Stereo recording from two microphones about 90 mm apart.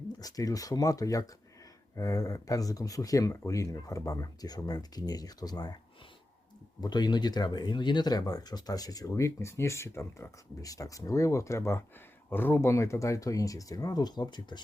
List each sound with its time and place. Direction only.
0.2 s speech: 40° left (ahead or behind)
6.8 s speech: 50° left (ahead or behind); by 12.7 s 20° left (ahead or behind)
12.7 s speech: 35° left (ahead or behind); by 14.6 s 55° left (ahead or behind)